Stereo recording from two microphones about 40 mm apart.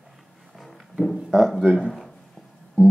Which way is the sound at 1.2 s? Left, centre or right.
Centre.